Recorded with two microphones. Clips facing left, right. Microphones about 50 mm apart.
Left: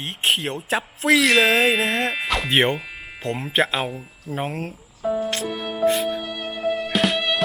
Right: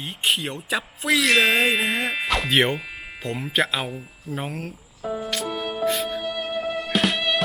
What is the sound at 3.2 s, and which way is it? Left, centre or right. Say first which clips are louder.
Speech: left 2 dB; left.